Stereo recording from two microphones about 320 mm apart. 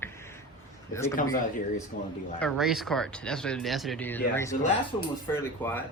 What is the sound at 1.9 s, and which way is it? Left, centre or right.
Speech, left.